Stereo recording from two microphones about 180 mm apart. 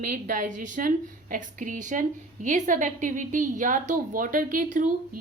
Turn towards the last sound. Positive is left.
turn(degrees=-45)  # may be behind; listen again after turning